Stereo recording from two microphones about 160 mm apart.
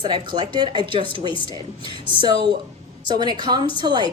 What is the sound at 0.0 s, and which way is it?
A woman's voice, 30° right (ahead or behind).